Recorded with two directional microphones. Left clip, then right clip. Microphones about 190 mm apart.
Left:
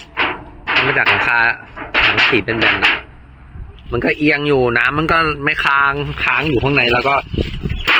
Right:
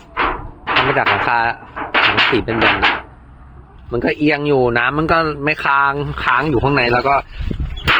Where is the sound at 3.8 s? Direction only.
5° right (ahead or behind).